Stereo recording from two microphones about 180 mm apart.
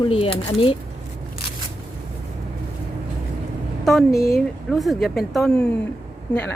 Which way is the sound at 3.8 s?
Centre (ahead or behind).